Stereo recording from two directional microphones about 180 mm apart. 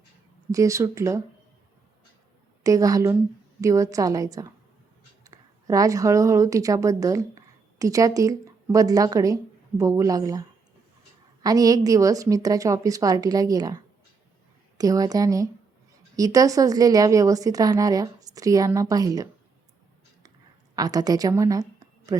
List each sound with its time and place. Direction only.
0.5 s speech: 15° right (ahead or behind)
2.6 s a woman's voice: 20° right (ahead or behind)
11.4 s a woman's voice: 20° right (ahead or behind)
20.7 s a woman's voice: 20° right (ahead or behind)